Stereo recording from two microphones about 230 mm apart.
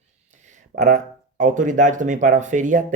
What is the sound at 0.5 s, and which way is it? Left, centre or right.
Speech, right.